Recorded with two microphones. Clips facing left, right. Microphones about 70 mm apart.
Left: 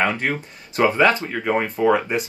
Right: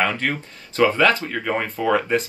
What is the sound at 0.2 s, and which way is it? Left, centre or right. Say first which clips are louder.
Speech: left 1 dB; centre.